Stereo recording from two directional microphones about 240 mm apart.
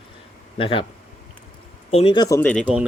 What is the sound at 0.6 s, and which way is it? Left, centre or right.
Speech, left.